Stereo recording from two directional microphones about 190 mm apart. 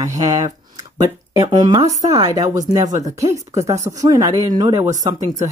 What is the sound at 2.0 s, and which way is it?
Speech, 20° right (ahead or behind).